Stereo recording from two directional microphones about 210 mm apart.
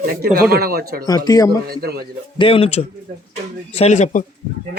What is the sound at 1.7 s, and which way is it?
Speech, 50° right (ahead or behind).